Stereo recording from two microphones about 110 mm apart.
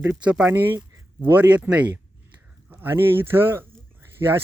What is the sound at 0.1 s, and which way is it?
Speech, 10° right (ahead or behind).